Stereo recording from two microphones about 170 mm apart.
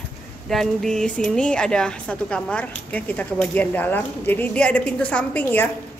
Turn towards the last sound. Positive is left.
turn(degrees=10)  # may be behind; listen again after turning